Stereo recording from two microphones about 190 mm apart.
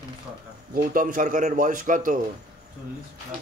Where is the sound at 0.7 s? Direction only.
45° right (ahead or behind).